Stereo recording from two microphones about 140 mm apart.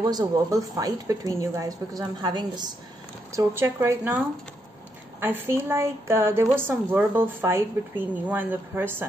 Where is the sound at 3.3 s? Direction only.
20° right (ahead or behind).